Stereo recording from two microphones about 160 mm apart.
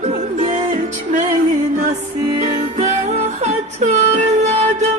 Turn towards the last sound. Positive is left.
turn(degrees=-45)  # may be behind; listen again after turning